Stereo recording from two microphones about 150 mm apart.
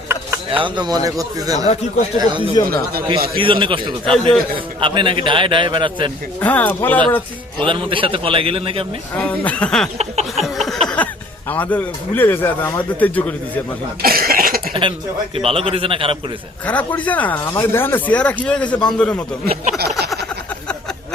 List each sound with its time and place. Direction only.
0.1 s a sound: 15° right (ahead or behind)
0.6 s a man's voice: 30° right (ahead or behind)
1.5 s speech: 50° left (ahead or behind)
2.1 s a man's voice: 30° right (ahead or behind)
4.1 s a man's voice: 5° left (ahead or behind)
4.5 s a man's voice: 35° right (ahead or behind)
6.4 s speech: 10° left (ahead or behind)
7.6 s a man's voice: 35° right (ahead or behind)
9.1 s speech: 10° left (ahead or behind)
10.0 s a sound: 45° right (ahead or behind)
10.4 s speech: centre (ahead or behind)
14.0 s cough: 80° right
14.7 s a man's voice: 35° right (ahead or behind)
16.6 s speech: 10° left (ahead or behind)